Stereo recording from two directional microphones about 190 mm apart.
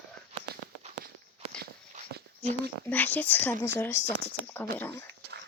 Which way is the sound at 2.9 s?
10° left (ahead or behind).